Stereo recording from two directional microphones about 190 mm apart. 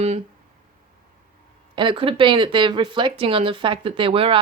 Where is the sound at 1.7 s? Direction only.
25° right (ahead or behind).